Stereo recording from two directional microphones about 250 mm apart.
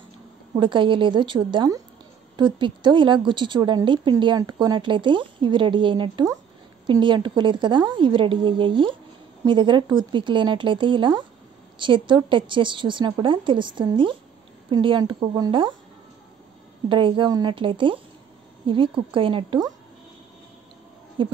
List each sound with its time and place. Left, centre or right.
0.6 s a woman's voice: centre
16.9 s a woman's voice: centre
21.2 s a woman's voice: centre